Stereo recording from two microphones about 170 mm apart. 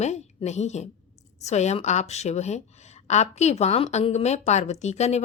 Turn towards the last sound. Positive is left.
turn(degrees=40)  # may be behind; listen again after turning